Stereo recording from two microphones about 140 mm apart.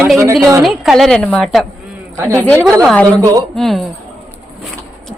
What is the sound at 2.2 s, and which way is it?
Speech, 25° right (ahead or behind).